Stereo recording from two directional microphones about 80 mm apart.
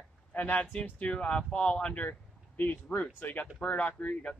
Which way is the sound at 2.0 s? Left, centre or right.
Left.